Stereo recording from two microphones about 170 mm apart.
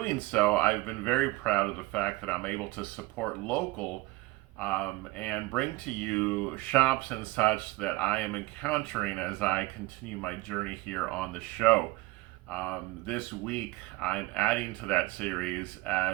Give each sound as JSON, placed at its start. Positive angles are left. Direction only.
{"t": 0.0, "sound": "speech", "side_deg": 5}
{"t": 4.6, "sound": "speech", "side_deg": 5}